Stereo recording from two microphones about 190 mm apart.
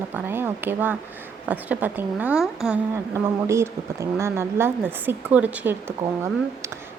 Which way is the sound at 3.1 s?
15° right (ahead or behind).